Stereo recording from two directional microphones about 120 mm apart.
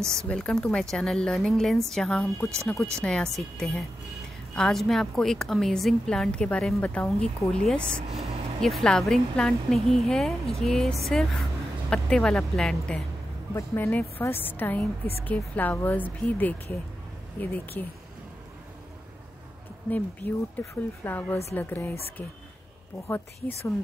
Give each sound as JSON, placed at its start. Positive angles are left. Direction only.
{"t": 0.3, "sound": "a woman's voice", "side_deg": 10}
{"t": 13.6, "sound": "speech", "side_deg": 20}
{"t": 19.9, "sound": "speech", "side_deg": 15}